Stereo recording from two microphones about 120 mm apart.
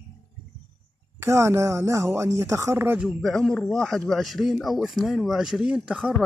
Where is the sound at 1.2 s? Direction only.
25° right (ahead or behind).